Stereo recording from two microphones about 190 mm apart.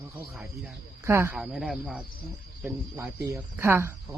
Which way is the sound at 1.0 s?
15° right (ahead or behind).